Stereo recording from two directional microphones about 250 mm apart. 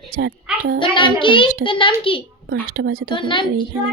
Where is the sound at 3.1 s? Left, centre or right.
Centre.